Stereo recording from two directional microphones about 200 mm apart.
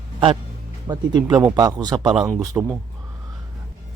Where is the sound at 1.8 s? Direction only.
20° right (ahead or behind).